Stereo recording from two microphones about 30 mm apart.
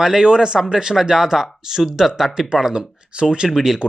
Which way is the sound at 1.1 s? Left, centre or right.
Centre.